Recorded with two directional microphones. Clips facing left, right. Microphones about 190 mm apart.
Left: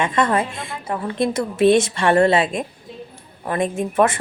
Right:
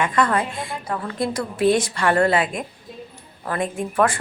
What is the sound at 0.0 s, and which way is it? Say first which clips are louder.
A woman's voice: left 1 dB; 25° left (ahead or behind).